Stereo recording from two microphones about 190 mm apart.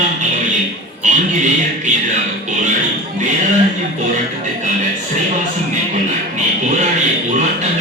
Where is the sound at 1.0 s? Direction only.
40° right (ahead or behind).